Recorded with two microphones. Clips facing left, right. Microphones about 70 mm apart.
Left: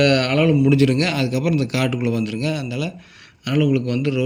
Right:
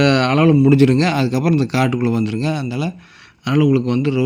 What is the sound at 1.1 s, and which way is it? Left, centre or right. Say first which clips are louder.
Speech: right 4 dB; right.